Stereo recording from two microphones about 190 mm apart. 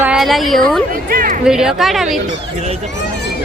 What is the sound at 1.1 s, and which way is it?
Speech, 50° right (ahead or behind).